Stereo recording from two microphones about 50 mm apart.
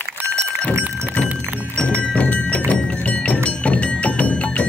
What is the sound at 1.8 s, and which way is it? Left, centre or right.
Music, left.